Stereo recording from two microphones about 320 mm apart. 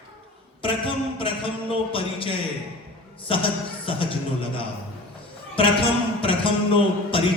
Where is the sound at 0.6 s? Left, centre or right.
Centre.